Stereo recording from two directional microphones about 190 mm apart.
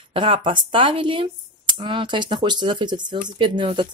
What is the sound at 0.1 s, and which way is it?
Speech, 25° right (ahead or behind).